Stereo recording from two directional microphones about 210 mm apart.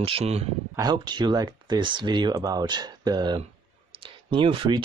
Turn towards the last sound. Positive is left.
turn(degrees=-25)  # may be behind; listen again after turning